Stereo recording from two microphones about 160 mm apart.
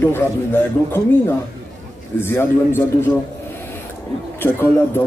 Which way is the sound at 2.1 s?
15° left (ahead or behind).